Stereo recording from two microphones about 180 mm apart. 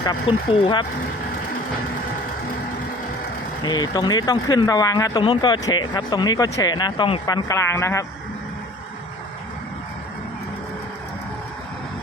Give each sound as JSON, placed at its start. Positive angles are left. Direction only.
{"t": 0.0, "sound": "speech", "side_deg": 25}
{"t": 3.6, "sound": "speech", "side_deg": 25}